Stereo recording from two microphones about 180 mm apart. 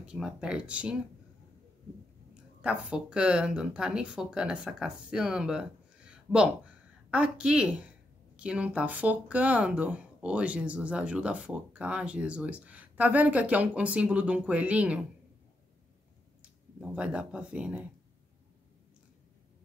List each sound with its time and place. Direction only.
0.0 s speech: 5° right (ahead or behind)
2.6 s speech: 5° right (ahead or behind)
16.9 s speech: 5° right (ahead or behind)